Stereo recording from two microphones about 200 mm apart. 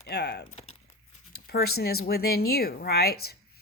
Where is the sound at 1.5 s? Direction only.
50° left (ahead or behind).